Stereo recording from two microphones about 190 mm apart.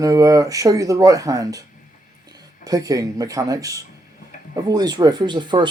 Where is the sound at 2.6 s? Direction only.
20° right (ahead or behind).